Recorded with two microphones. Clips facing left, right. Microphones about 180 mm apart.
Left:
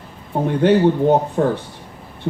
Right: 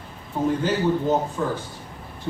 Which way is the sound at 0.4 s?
65° left (ahead or behind).